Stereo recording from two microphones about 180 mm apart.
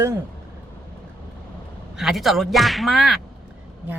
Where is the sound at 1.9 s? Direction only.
Centre (ahead or behind).